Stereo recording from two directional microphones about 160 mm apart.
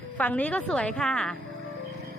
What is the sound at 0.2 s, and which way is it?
A woman's voice, 10° left (ahead or behind).